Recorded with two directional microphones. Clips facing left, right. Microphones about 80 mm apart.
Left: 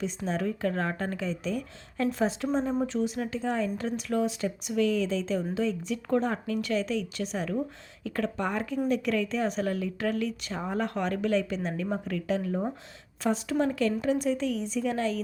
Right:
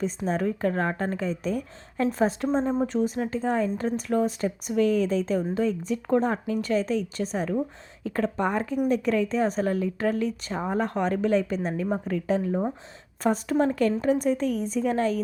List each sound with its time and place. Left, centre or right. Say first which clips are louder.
0.3 s a woman's voice: right 3 dB; right
11.7 s speech: right 4 dB; right
13.2 s a woman's voice: right 4 dB; right